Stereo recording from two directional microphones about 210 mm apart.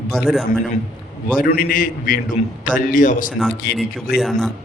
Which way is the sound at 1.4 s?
45° left (ahead or behind).